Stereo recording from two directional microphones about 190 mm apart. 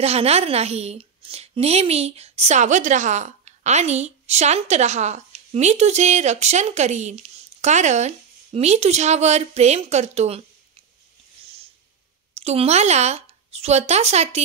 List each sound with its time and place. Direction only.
0.0 s a woman's voice: 35° right (ahead or behind)
12.4 s speech: 35° right (ahead or behind)